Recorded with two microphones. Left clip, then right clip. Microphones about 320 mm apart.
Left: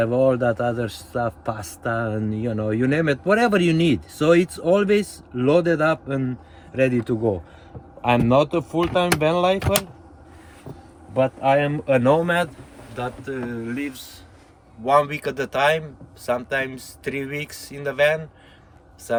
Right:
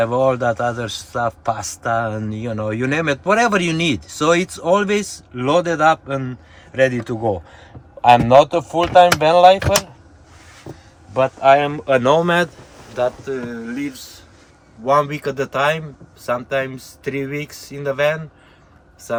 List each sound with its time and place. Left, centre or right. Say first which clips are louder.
0.4 s a man's voice: right 3 dB; right
11.1 s a man's voice: right 6 dB; right
13.0 s speech: right 8 dB; centre
14.8 s speech: right 2 dB; centre